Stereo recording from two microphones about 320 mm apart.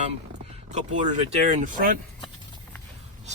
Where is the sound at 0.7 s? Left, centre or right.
Right.